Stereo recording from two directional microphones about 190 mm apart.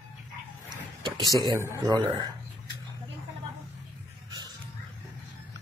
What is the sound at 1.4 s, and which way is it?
Speech, 20° right (ahead or behind).